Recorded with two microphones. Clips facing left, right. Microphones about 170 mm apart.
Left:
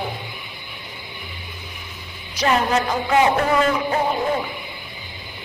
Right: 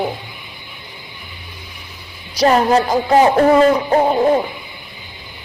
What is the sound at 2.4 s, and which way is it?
Speech, 35° right (ahead or behind).